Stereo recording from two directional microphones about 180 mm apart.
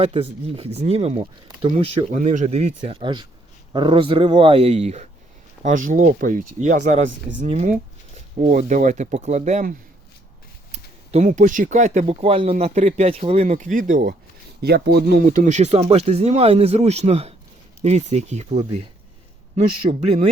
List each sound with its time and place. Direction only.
0.0 s speech: 35° right (ahead or behind); by 14.2 s 50° right (ahead or behind)
14.6 s speech: 65° right (ahead or behind); by 20.2 s 35° right (ahead or behind)